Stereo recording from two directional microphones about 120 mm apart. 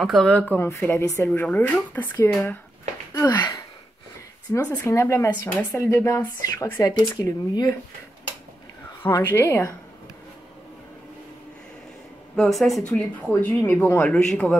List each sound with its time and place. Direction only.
0.0 s speech: centre (ahead or behind)
2.1 s speech: 25° left (ahead or behind)
4.6 s speech: 20° left (ahead or behind)
9.0 s speech: 20° left (ahead or behind)
12.5 s a man's voice: centre (ahead or behind)
13.3 s speech: 15° left (ahead or behind)
14.0 s a man's voice: 5° left (ahead or behind)